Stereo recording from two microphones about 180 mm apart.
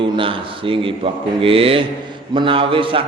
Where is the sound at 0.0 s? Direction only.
30° right (ahead or behind).